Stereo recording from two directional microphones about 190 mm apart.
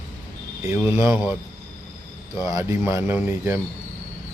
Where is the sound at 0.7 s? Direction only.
10° right (ahead or behind).